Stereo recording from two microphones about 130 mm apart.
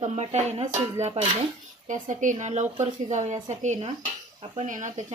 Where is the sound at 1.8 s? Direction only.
75° right (ahead or behind).